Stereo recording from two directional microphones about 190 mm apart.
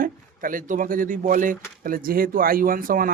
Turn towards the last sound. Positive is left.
turn(degrees=-50)  # may be behind; listen again after turning